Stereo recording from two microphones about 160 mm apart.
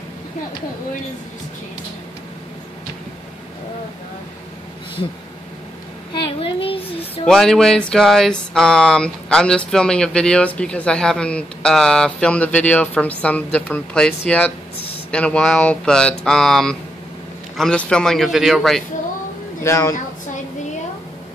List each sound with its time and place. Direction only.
6.1 s a sound: 30° left (ahead or behind)
7.2 s speech: centre (ahead or behind)
19.6 s speech: 20° left (ahead or behind)